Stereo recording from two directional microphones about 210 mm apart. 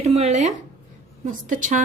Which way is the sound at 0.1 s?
30° right (ahead or behind).